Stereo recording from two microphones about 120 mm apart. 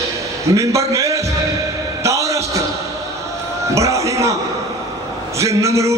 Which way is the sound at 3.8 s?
25° right (ahead or behind).